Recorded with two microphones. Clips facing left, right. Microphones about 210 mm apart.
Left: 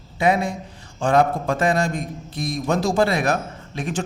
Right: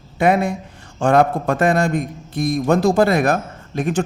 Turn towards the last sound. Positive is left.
turn(degrees=-55)  # may be behind; listen again after turning